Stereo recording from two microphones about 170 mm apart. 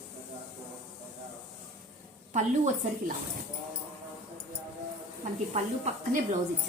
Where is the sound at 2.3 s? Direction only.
45° right (ahead or behind).